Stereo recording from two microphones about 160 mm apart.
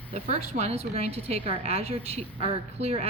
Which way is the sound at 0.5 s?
40° right (ahead or behind).